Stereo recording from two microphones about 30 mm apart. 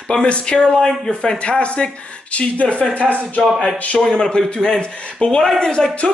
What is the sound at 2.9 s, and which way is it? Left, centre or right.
Speech, right.